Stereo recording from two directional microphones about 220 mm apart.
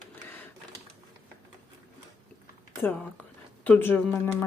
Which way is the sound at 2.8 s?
10° left (ahead or behind).